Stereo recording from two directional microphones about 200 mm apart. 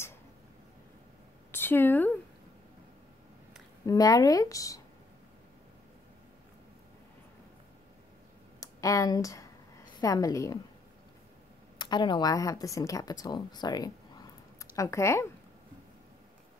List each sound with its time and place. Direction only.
1.5 s a woman's voice: 10° left (ahead or behind)
3.8 s a woman's voice: 15° left (ahead or behind)
8.5 s a sound: 15° left (ahead or behind)
9.9 s a woman's voice: 15° left (ahead or behind)
11.8 s a woman's voice: 20° left (ahead or behind)